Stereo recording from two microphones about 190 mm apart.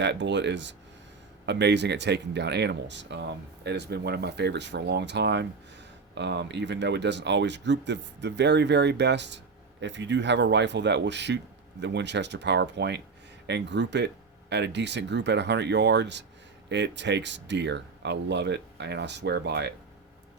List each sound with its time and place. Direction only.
0.0 s speech: 65° right (ahead or behind)